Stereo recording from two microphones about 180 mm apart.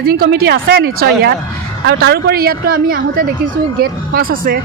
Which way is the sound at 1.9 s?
65° right (ahead or behind).